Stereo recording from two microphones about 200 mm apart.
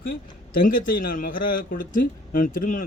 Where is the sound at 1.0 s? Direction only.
45° left (ahead or behind).